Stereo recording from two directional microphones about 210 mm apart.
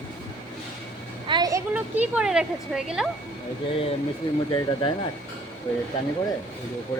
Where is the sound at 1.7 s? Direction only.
5° right (ahead or behind).